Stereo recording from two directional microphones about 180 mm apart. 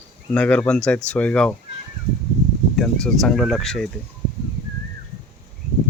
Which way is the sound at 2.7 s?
5° left (ahead or behind).